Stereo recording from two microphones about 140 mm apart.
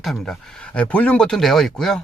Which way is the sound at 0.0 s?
Centre (ahead or behind).